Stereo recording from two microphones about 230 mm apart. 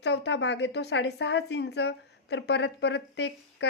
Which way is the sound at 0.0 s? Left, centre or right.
Left.